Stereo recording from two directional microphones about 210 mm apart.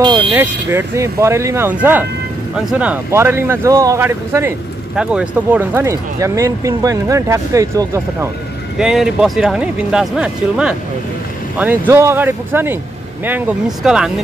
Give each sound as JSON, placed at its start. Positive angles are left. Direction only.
{"t": 0.0, "sound": "vehicle", "side_deg": -20}
{"t": 0.3, "sound": "speech", "side_deg": -10}
{"t": 8.7, "sound": "speech", "side_deg": 0}